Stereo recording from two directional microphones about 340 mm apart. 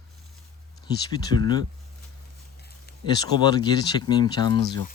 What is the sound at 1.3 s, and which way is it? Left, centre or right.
Speech, right.